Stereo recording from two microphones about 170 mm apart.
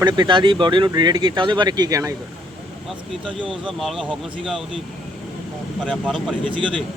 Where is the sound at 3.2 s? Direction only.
30° right (ahead or behind).